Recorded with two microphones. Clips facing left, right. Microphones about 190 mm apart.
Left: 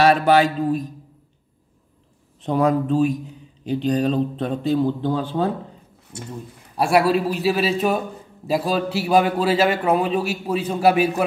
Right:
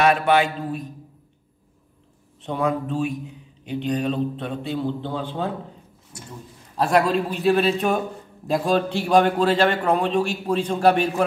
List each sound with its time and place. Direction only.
0.0 s speech: 35° left (ahead or behind)
2.4 s speech: 40° left (ahead or behind)
6.1 s speech: 25° left (ahead or behind)
6.8 s a man's voice: 10° left (ahead or behind)